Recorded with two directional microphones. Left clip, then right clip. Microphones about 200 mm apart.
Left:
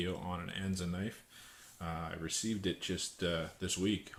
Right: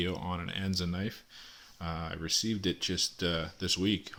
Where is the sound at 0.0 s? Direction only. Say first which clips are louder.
Right 4 dB; 45° right (ahead or behind).